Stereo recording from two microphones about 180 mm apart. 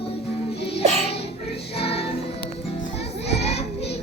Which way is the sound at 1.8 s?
35° left (ahead or behind).